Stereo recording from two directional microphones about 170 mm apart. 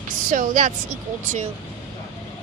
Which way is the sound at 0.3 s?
50° right (ahead or behind).